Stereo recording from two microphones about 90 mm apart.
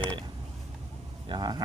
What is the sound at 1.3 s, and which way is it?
Speech, 50° right (ahead or behind).